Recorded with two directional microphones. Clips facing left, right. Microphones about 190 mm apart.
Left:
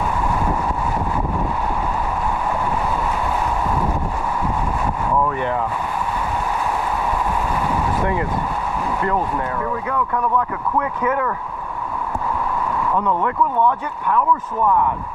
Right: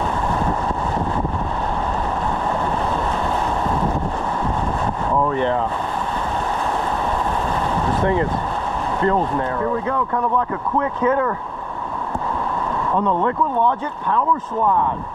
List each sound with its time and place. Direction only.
5.2 s boat: 25° right (ahead or behind)
8.0 s speech: 25° right (ahead or behind)
9.6 s speech: 35° right (ahead or behind)
12.9 s speech: 25° right (ahead or behind)